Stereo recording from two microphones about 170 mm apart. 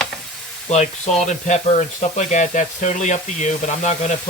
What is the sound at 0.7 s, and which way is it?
Speech, 40° left (ahead or behind).